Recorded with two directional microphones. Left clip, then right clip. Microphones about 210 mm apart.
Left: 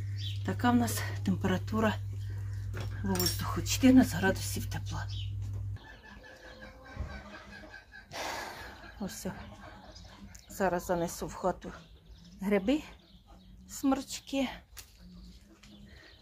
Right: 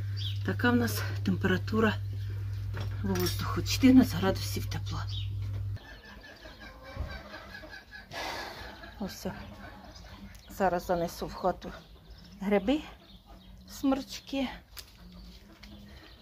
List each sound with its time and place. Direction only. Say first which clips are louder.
0.5 s speech: right 1 dB; 10° left (ahead or behind)
3.3 s speech: right 2 dB; 10° left (ahead or behind)
8.1 s a sound: right 1 dB; 15° left (ahead or behind)
10.5 s speech: right 2 dB; 15° left (ahead or behind)